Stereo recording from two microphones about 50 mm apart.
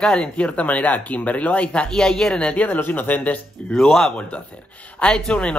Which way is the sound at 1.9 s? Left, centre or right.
Centre.